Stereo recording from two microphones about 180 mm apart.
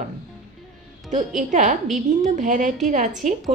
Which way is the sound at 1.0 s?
45° right (ahead or behind).